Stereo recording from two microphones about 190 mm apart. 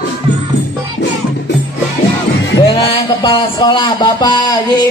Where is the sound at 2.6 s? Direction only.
25° left (ahead or behind).